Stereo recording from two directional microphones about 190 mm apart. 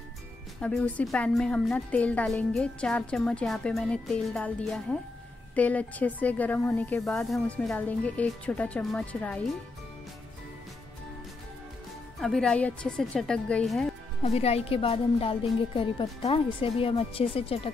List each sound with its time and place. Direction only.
0.6 s a woman's voice: 5° left (ahead or behind)
12.2 s a woman's voice: 5° left (ahead or behind)
14.2 s speech: 30° left (ahead or behind)